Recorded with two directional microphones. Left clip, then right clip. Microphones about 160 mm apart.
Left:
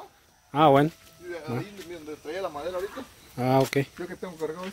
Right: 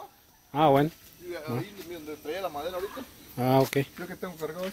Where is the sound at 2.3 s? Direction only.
30° right (ahead or behind).